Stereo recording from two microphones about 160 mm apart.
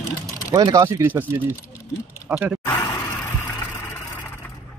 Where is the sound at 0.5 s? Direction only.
25° right (ahead or behind); by 2.6 s 10° right (ahead or behind).